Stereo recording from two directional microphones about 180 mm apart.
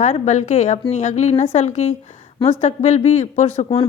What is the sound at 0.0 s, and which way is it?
A woman's voice, 40° left (ahead or behind).